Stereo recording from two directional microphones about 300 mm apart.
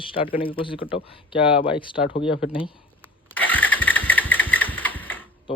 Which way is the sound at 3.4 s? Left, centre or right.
Centre.